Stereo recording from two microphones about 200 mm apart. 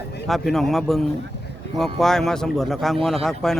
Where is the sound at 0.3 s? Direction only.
Centre (ahead or behind).